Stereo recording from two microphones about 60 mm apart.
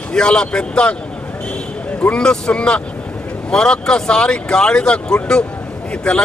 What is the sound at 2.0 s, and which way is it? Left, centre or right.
Speech, centre.